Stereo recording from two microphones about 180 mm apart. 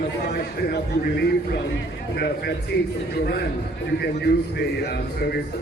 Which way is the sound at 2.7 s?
70° left (ahead or behind).